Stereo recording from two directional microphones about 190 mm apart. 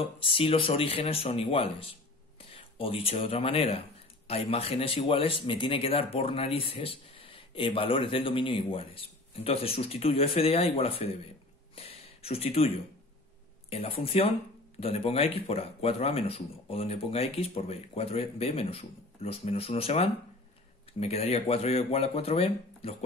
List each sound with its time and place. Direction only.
0.0 s speech: 30° left (ahead or behind)
11.7 s a sound: 30° left (ahead or behind)
13.7 s speech: 30° left (ahead or behind)